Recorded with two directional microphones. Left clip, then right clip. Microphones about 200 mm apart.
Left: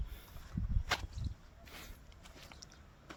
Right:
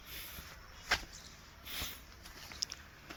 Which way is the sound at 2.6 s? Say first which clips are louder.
Right 15 dB; 5° left (ahead or behind).